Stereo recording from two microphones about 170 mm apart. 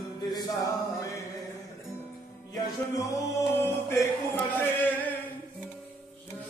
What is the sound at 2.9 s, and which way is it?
Music, 20° left (ahead or behind).